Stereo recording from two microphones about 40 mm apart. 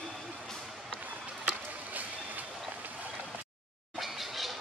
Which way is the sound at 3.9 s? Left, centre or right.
Centre.